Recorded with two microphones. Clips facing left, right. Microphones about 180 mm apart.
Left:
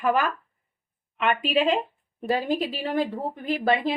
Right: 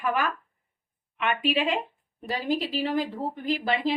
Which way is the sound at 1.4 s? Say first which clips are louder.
Left 3 dB; 40° left (ahead or behind).